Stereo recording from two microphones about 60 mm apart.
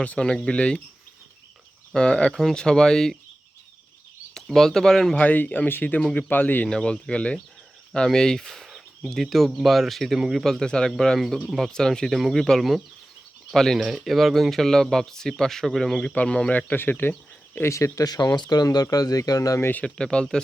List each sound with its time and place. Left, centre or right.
0.2 s speech: centre
1.9 s speech: centre
4.4 s speech: centre
5.1 s speech: left
6.7 s speech: centre
10.2 s speech: centre
10.4 s speech: centre
16.1 s speech: centre
17.0 s a sound: left
17.7 s speech: left
19.5 s speech: left
19.8 s speech: centre